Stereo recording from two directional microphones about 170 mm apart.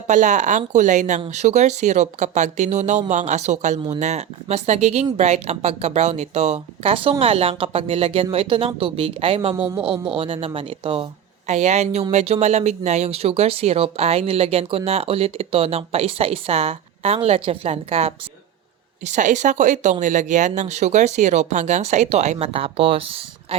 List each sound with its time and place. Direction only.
0.1 s speech: 45° right (ahead or behind)